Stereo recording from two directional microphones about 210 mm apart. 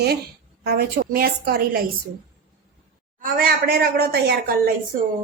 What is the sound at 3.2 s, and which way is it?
A woman's voice, 45° right (ahead or behind).